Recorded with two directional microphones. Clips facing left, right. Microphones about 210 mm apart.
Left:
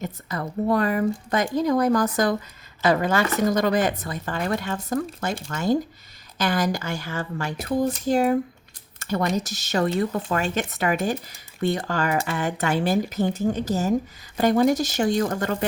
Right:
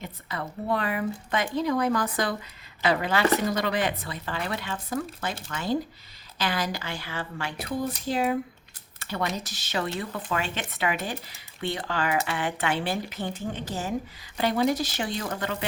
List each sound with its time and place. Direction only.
0.0 s speech: 45° left (ahead or behind)